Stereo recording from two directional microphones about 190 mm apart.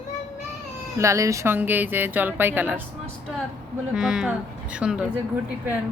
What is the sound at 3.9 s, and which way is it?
Speech, 5° right (ahead or behind).